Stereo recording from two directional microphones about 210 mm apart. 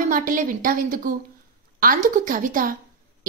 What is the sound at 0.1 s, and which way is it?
A woman's voice, 40° right (ahead or behind).